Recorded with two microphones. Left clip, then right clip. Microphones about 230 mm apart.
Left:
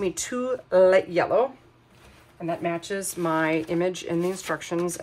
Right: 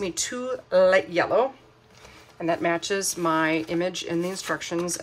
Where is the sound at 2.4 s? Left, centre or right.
Centre.